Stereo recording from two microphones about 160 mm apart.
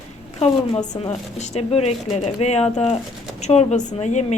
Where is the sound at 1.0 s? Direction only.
45° left (ahead or behind).